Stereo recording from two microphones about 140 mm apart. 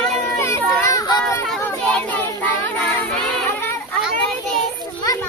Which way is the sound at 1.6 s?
15° left (ahead or behind).